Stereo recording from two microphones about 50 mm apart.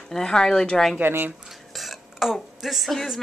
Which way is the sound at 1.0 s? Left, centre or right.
Right.